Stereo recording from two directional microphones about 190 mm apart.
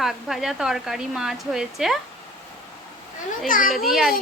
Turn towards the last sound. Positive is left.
turn(degrees=0)  # may be behind; listen again after turning